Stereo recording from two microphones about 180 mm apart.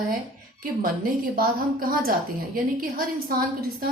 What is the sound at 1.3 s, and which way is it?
A woman's voice, 55° right (ahead or behind).